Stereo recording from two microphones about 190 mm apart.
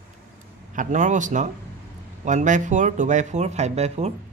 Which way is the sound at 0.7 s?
40° right (ahead or behind).